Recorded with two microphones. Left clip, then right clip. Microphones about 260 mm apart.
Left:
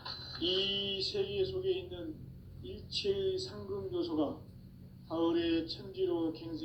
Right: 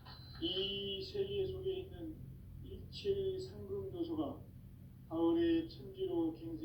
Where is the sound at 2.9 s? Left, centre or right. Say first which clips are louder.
Left 4 dB; left.